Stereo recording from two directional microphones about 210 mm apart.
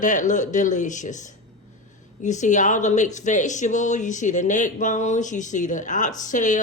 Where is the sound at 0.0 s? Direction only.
35° left (ahead or behind).